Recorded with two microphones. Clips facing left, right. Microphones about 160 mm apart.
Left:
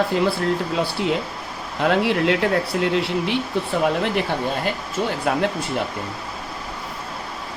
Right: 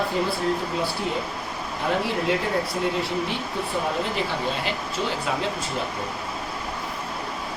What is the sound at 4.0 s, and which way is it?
Speech, 60° left (ahead or behind).